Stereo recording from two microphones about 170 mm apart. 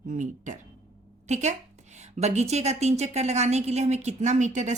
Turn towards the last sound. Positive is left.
turn(degrees=-45)  # may be behind; listen again after turning